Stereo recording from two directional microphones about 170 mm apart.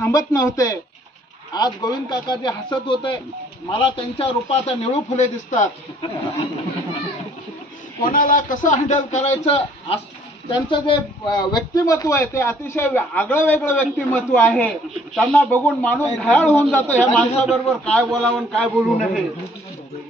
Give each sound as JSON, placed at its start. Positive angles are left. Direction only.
{"t": 0.0, "sound": "a man's voice", "side_deg": 20}
{"t": 8.0, "sound": "a man's voice", "side_deg": 55}
{"t": 10.5, "sound": "a man's voice", "side_deg": 30}